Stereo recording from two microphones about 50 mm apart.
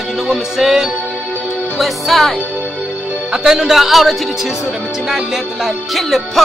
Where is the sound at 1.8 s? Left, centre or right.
Centre.